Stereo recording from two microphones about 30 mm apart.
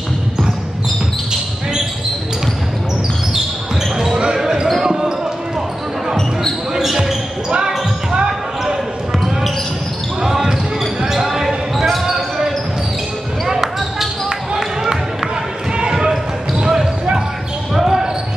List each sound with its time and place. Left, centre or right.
4.7 s basketball bounce: centre
10.2 s basketball bounce: centre
15.7 s basketball bounce: right
17.7 s basketball bounce: centre